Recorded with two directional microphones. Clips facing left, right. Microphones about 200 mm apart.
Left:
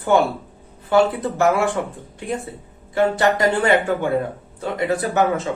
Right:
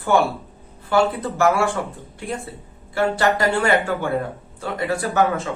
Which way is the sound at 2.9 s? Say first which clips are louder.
Left 2 dB; 20° left (ahead or behind).